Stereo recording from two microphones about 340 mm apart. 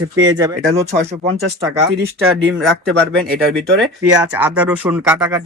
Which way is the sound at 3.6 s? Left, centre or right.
Centre.